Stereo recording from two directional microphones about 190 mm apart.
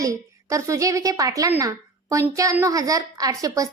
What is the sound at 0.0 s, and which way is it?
A woman's voice, 15° right (ahead or behind).